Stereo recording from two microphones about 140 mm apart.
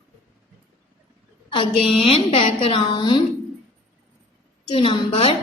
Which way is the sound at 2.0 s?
45° left (ahead or behind).